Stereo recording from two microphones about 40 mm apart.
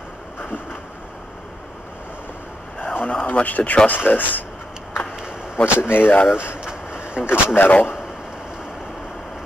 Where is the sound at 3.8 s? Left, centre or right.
Left.